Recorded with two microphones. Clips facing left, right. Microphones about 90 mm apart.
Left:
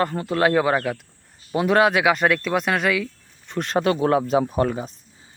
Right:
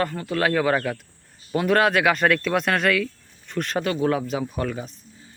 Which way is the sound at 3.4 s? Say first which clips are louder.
Left 4 dB; 25° left (ahead or behind).